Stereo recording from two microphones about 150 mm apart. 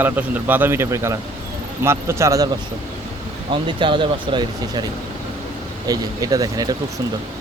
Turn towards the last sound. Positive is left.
turn(degrees=-25)  # may be behind; listen again after turning